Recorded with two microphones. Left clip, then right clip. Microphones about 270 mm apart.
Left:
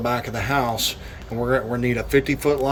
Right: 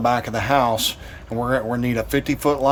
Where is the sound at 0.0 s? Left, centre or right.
Centre.